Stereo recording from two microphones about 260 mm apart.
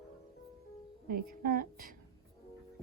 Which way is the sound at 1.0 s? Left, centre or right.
Right.